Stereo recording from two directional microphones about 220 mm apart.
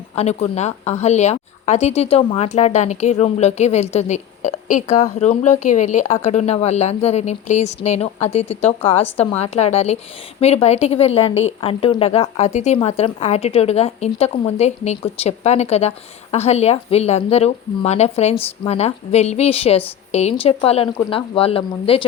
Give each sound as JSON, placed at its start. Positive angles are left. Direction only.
{"t": 0.2, "sound": "a woman's voice", "side_deg": 30}